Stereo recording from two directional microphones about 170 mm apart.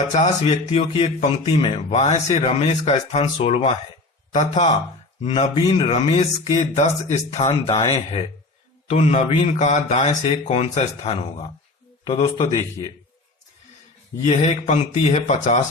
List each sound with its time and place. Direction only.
0.1 s speech: 45° left (ahead or behind)
7.5 s speech: 30° left (ahead or behind)
7.9 s speech: 40° left (ahead or behind)
14.3 s speech: 40° left (ahead or behind)